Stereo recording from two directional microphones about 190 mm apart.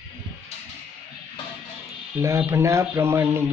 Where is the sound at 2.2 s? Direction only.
15° right (ahead or behind).